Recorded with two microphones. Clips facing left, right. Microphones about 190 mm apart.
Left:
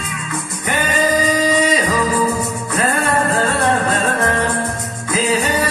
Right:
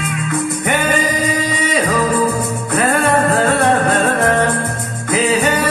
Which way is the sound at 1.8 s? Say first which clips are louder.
Right 2 dB; 60° right (ahead or behind).